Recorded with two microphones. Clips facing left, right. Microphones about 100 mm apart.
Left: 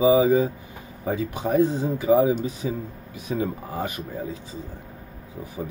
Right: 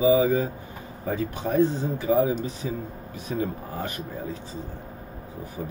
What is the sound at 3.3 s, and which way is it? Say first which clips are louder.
Speech: left 2 dB; 15° left (ahead or behind).